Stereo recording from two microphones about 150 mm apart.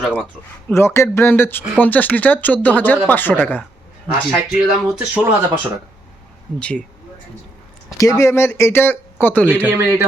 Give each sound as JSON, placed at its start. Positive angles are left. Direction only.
{"t": 0.0, "sound": "speech", "side_deg": -5}
{"t": 0.7, "sound": "speech", "side_deg": 15}
{"t": 4.1, "sound": "speech", "side_deg": -5}
{"t": 6.6, "sound": "speech", "side_deg": 10}
{"t": 7.9, "sound": "speech", "side_deg": 20}
{"t": 9.5, "sound": "speech", "side_deg": -15}